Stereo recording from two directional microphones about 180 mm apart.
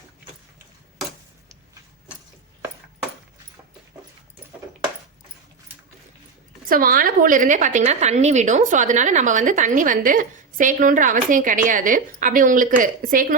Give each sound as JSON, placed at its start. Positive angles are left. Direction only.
{"t": 6.7, "sound": "a woman's voice", "side_deg": -55}